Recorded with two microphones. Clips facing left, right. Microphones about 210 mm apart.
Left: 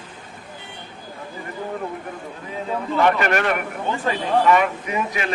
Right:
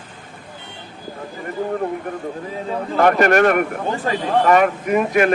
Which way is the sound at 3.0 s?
45° right (ahead or behind).